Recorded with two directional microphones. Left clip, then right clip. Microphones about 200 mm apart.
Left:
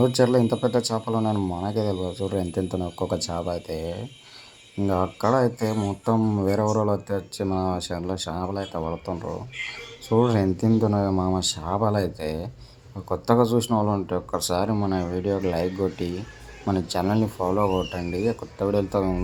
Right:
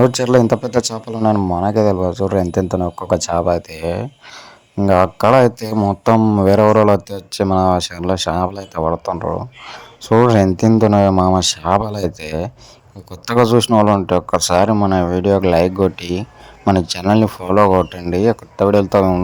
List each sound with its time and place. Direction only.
0.3 s speech: 45° right (ahead or behind)